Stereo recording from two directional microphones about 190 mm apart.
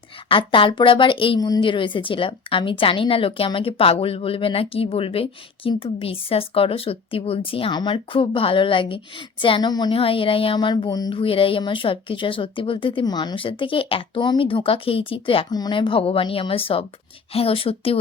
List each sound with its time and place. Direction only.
0.3 s a woman's voice: 25° left (ahead or behind)